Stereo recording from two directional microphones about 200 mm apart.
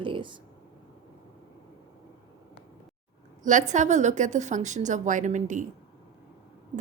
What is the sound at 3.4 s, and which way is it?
A woman's voice, 40° right (ahead or behind).